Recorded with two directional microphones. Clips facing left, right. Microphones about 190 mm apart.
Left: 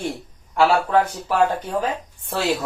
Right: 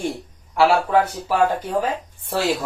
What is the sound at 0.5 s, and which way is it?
Speech, 10° right (ahead or behind).